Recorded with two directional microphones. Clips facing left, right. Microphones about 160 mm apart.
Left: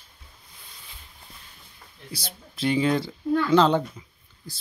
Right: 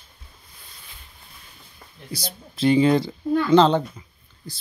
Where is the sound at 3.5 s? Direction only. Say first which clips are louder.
Right 4 dB; 30° right (ahead or behind).